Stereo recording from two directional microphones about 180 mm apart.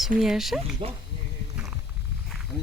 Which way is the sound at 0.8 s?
30° right (ahead or behind).